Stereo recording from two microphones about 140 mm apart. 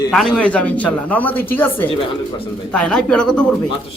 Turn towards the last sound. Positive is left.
turn(degrees=10)  # may be behind; listen again after turning